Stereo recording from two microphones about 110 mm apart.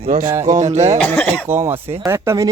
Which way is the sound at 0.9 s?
10° left (ahead or behind).